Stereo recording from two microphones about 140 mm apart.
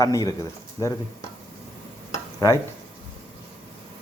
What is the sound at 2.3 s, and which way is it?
Speech, 20° left (ahead or behind).